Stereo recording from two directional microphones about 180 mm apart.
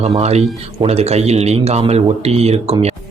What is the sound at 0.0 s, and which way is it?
Speech, 35° right (ahead or behind).